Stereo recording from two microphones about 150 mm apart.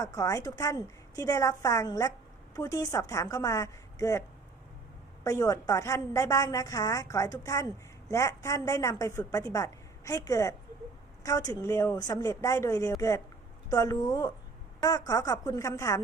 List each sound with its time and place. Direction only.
0.0 s a woman's voice: 20° left (ahead or behind)
5.2 s a woman's voice: 20° left (ahead or behind)